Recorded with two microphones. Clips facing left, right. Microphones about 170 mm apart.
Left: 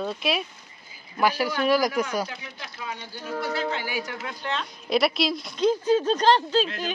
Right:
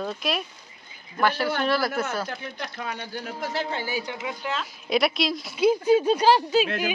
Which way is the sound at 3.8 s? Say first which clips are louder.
Right 1 dB; 25° right (ahead or behind).